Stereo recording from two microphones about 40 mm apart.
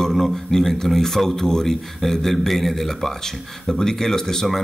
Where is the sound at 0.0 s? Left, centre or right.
Centre.